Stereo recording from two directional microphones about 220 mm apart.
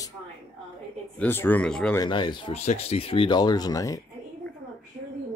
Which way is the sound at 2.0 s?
20° left (ahead or behind).